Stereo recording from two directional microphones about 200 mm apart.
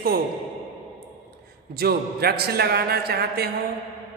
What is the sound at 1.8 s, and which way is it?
A man's voice, 50° right (ahead or behind).